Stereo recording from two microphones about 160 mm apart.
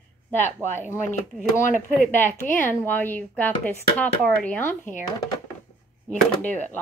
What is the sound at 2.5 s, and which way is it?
Speech, 10° left (ahead or behind).